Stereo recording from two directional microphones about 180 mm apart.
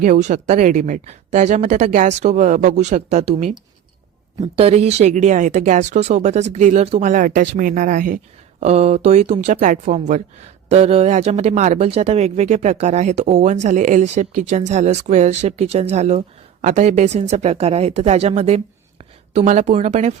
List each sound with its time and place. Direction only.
0.0 s speech: 45° right (ahead or behind)
7.1 s speech: 50° right (ahead or behind)